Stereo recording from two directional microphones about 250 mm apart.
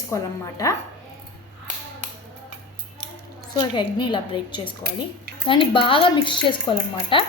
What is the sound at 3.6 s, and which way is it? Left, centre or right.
A woman's voice, centre.